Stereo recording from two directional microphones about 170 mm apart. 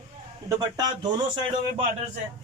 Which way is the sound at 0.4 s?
25° right (ahead or behind).